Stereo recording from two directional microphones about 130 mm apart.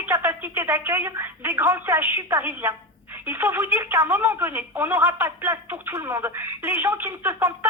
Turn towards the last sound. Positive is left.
turn(degrees=-20)  # may be behind; listen again after turning